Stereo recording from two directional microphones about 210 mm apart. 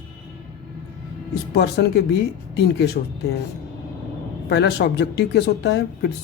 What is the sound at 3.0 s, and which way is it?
Speech, 40° left (ahead or behind).